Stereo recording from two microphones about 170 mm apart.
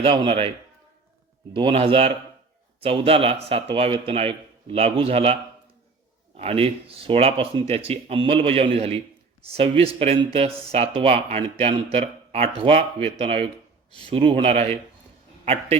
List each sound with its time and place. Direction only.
0.0 s speech: 30° right (ahead or behind)
1.5 s speech: 30° right (ahead or behind)